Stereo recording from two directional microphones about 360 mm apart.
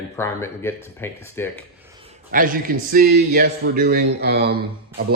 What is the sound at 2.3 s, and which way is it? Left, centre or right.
A man's voice, right.